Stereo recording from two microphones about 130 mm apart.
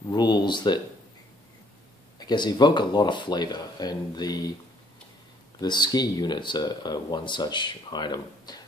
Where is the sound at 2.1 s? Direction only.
35° left (ahead or behind).